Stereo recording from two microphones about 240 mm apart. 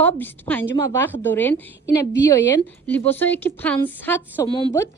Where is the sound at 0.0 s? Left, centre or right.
Centre.